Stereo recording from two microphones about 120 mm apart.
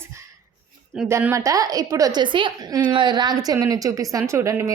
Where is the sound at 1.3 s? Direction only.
30° right (ahead or behind).